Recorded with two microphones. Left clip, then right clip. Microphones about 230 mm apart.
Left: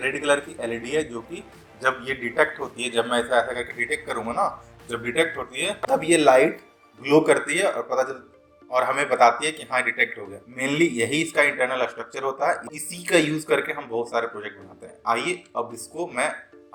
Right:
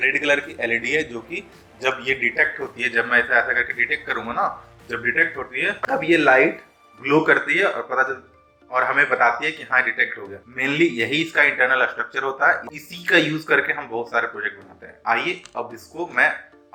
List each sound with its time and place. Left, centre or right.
0.0 s a man's voice: centre